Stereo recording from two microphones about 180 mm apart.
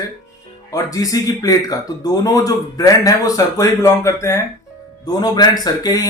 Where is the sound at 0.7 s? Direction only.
20° left (ahead or behind).